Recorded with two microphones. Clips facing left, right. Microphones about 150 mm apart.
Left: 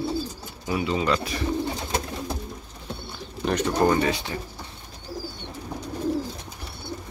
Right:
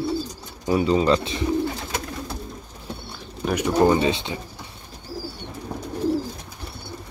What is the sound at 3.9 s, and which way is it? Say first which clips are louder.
Speech: right 2 dB; 20° right (ahead or behind).